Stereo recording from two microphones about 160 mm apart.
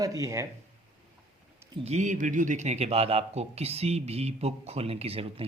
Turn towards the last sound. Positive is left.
turn(degrees=-40)  # may be behind; listen again after turning